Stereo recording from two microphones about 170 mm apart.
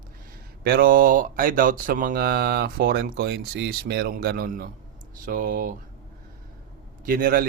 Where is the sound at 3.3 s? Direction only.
85° right; by 5.7 s 55° right (ahead or behind).